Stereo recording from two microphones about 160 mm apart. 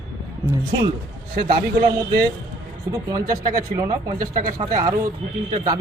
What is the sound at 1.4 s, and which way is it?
Speech, 70° right (ahead or behind).